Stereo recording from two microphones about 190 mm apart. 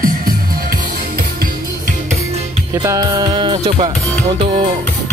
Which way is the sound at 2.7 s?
15° right (ahead or behind).